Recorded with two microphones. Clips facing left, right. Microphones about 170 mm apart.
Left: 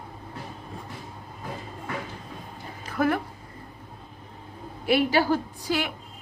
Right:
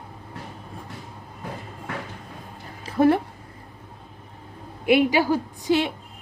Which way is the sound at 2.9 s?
30° right (ahead or behind).